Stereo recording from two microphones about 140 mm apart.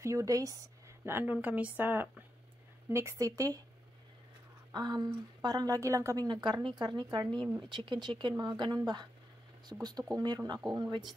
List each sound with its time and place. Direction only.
0.0 s a woman's voice: 25° right (ahead or behind)
4.7 s a woman's voice: 30° right (ahead or behind)
9.7 s a woman's voice: 15° right (ahead or behind)
10.1 s a woman's voice: 30° right (ahead or behind)